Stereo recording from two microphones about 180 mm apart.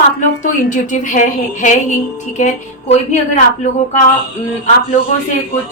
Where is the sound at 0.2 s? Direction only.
45° left (ahead or behind).